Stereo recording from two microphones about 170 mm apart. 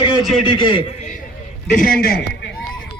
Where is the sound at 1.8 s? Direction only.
60° left (ahead or behind).